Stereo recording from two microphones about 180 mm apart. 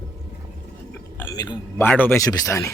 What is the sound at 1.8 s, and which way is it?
Speech, 10° left (ahead or behind).